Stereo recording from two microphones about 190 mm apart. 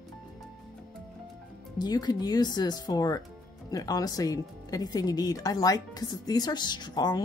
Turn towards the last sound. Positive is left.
turn(degrees=20)  # may be behind; listen again after turning